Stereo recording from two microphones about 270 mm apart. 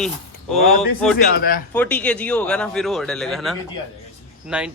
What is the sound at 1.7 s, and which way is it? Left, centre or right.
Speech, centre.